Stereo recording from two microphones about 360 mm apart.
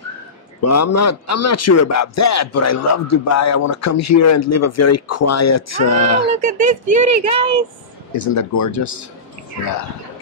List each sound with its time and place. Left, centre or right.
0.7 s a man's voice: left
6.4 s speech: right
8.3 s a man's voice: left